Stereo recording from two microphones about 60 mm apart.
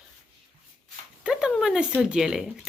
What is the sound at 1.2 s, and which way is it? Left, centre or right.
Speech, centre.